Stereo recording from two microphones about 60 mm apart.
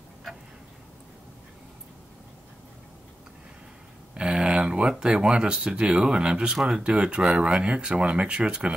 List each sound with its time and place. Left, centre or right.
4.1 s speech: centre